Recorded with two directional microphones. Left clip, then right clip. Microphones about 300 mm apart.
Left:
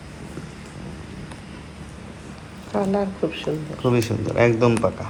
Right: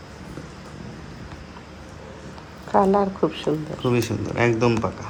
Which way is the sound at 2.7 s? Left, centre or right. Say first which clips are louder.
Right 5 dB; right.